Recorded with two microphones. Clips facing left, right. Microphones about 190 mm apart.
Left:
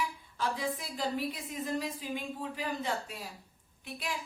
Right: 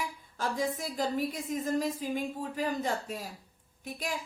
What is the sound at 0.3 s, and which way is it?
A woman's voice, 45° right (ahead or behind).